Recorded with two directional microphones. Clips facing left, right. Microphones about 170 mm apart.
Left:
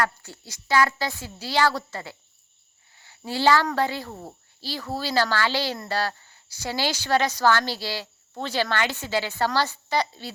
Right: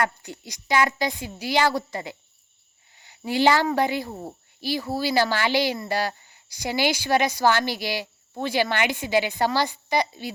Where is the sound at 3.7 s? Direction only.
15° right (ahead or behind).